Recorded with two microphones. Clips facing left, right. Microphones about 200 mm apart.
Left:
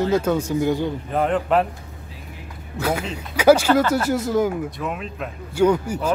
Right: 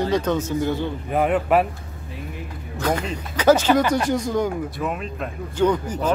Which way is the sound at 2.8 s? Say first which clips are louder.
Even; 5° left (ahead or behind).